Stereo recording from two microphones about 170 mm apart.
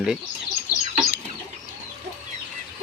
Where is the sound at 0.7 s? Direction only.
20° left (ahead or behind).